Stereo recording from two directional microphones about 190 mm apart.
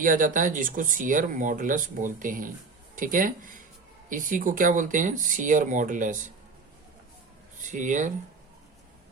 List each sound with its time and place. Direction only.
0.0 s speech: 45° right (ahead or behind)
7.6 s speech: 40° right (ahead or behind)